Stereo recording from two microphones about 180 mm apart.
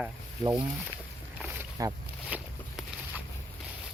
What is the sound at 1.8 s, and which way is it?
Speech, 20° right (ahead or behind).